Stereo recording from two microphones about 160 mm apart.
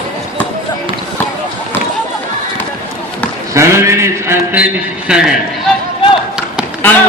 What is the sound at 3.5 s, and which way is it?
Mantra, 15° right (ahead or behind).